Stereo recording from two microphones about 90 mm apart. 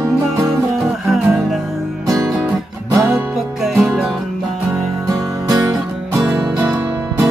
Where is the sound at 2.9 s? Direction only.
35° right (ahead or behind).